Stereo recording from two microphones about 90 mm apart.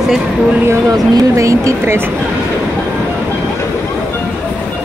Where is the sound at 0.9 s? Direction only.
40° right (ahead or behind).